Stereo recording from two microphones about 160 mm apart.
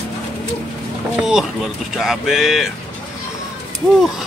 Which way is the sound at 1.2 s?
5° right (ahead or behind).